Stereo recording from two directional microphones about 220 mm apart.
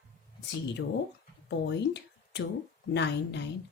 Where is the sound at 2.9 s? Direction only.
50° left (ahead or behind).